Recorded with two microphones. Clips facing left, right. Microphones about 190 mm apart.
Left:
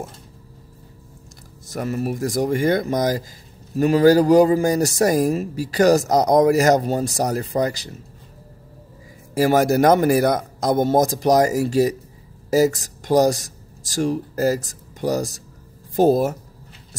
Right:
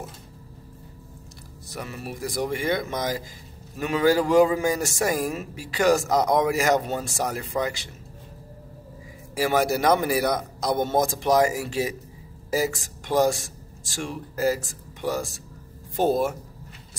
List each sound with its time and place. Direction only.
1.7 s a man's voice: 45° left (ahead or behind)
9.3 s a man's voice: 45° left (ahead or behind)